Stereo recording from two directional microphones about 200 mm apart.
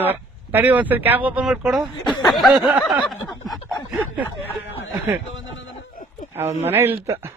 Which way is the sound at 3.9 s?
10° right (ahead or behind).